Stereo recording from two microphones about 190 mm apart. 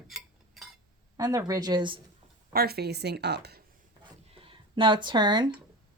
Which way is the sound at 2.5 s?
55° right (ahead or behind).